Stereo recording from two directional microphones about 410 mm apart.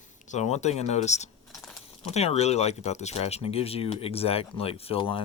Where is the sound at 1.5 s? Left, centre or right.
Centre.